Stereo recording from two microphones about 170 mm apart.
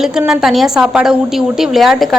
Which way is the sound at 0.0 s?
5° right (ahead or behind).